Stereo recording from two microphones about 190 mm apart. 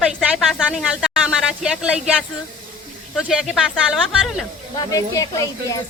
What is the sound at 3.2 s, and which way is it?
Speech, centre (ahead or behind).